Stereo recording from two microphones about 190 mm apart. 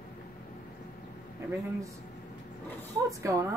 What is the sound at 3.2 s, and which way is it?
Speech, 15° right (ahead or behind).